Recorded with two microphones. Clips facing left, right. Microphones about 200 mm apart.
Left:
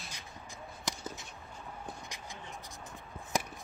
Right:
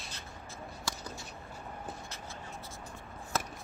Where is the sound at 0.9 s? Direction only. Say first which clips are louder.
Left 2 dB; 20° left (ahead or behind).